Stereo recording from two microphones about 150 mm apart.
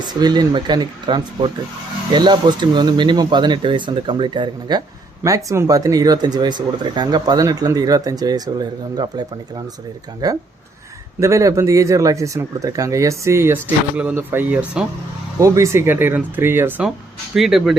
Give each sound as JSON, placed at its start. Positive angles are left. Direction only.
{"t": 0.1, "sound": "speech", "side_deg": -30}
{"t": 10.2, "sound": "speech", "side_deg": -25}
{"t": 15.4, "sound": "speech", "side_deg": -20}
{"t": 17.3, "sound": "speech", "side_deg": 0}